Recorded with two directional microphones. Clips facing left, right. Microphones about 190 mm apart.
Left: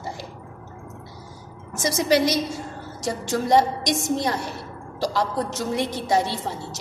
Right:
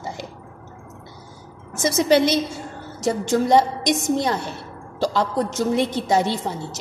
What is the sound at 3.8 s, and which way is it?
Speech, 20° right (ahead or behind).